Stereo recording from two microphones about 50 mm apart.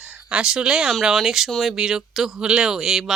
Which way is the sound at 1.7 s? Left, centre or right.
Centre.